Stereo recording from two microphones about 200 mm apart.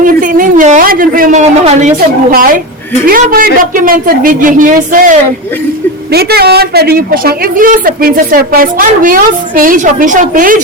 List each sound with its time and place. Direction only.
0.0 s a woman's voice: 45° right (ahead or behind)